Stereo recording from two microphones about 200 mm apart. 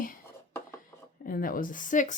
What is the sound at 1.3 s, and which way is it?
Speech, 45° left (ahead or behind).